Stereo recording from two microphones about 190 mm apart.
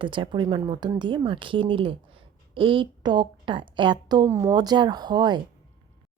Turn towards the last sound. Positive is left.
turn(degrees=-20)  # may be behind; listen again after turning